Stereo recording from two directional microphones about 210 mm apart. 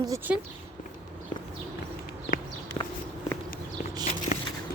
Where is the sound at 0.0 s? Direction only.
15° right (ahead or behind).